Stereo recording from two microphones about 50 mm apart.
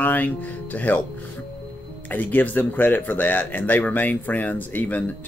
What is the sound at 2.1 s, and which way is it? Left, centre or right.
Speech, left.